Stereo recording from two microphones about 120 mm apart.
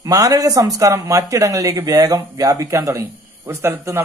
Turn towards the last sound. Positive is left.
turn(degrees=-25)  # may be behind; listen again after turning